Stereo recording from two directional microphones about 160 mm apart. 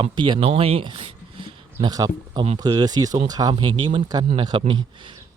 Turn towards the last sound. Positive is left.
turn(degrees=-30)  # may be behind; listen again after turning